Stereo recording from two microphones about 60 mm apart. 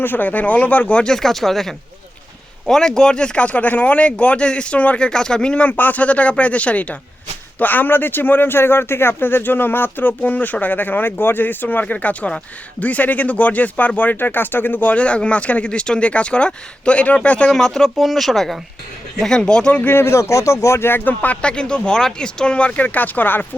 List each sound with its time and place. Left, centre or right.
0.0 s speech: left
1.0 s speech: centre
5.6 s speech: left
14.9 s speech: left
17.5 s speech: centre
19.9 s speech: left